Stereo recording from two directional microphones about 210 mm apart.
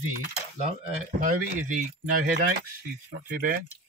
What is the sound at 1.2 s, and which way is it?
Speech, 40° right (ahead or behind).